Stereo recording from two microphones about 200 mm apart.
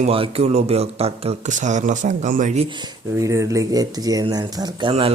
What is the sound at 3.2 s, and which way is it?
Speech, 15° right (ahead or behind).